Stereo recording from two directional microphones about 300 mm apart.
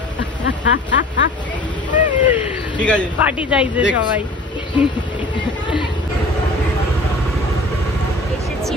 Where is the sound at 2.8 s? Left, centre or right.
Centre.